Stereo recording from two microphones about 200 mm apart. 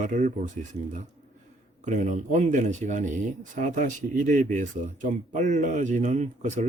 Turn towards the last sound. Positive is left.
turn(degrees=-35)  # may be behind; listen again after turning